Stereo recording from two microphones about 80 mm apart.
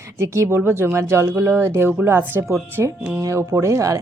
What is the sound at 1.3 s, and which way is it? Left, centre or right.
Speech, right.